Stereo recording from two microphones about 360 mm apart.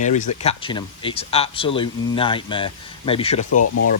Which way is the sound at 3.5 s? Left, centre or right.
Left.